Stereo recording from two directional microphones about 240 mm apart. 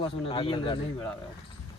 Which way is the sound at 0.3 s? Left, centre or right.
Left.